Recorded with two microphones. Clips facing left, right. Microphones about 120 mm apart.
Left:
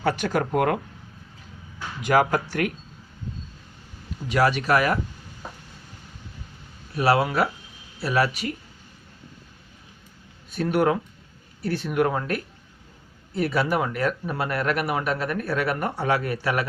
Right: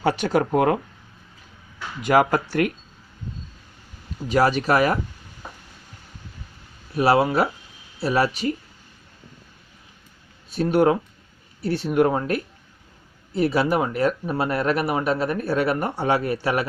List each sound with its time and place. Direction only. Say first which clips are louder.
0.0 s speech: right 3 dB; 30° right (ahead or behind)
2.0 s speech: right 2 dB; 40° right (ahead or behind)
4.3 s speech: right 2 dB; 35° right (ahead or behind)
7.0 s speech: right 3 dB; 25° right (ahead or behind)
10.5 s speech: right 3 dB; 30° right (ahead or behind)